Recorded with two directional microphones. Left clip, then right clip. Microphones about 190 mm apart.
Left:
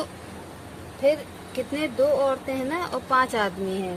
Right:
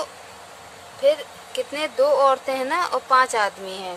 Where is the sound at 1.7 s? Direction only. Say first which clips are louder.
Right 3 dB; 25° right (ahead or behind).